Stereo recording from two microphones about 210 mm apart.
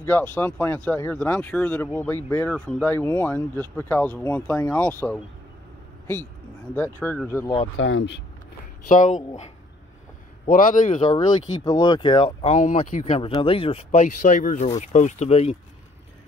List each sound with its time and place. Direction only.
0.0 s speech: 10° left (ahead or behind)
6.7 s speech: 10° left (ahead or behind)
7.7 s speech: 60° left (ahead or behind)
8.8 s speech: 35° left (ahead or behind)
10.5 s speech: 40° left (ahead or behind)
11.6 s speech: 20° left (ahead or behind)